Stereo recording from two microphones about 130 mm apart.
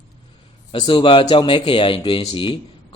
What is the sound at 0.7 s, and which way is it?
Speech, 40° left (ahead or behind).